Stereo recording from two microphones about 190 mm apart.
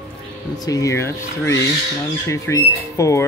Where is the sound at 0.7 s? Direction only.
15° left (ahead or behind).